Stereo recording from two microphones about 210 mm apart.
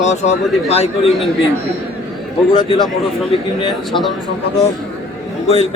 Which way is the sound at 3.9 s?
Centre (ahead or behind).